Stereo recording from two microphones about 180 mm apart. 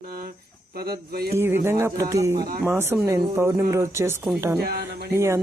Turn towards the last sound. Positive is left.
turn(degrees=-15)  # may be behind; listen again after turning